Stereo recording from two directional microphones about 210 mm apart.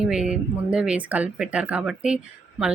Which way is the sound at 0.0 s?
5° right (ahead or behind).